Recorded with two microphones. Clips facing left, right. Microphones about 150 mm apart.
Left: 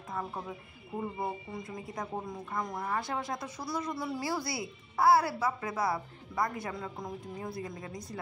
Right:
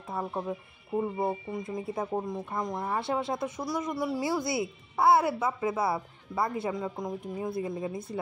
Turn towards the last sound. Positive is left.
turn(degrees=-25)  # may be behind; listen again after turning